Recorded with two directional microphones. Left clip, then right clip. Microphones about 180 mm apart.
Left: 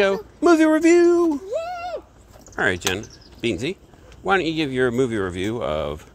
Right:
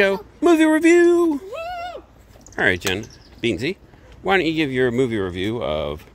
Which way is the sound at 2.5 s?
25° right (ahead or behind).